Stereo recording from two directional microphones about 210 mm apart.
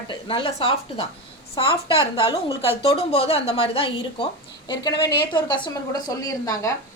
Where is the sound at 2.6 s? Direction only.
30° left (ahead or behind).